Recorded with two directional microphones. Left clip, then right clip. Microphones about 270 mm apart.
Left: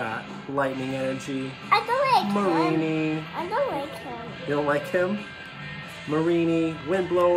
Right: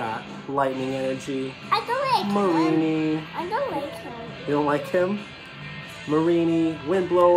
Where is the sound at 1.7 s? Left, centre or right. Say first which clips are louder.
Left 2 dB; centre.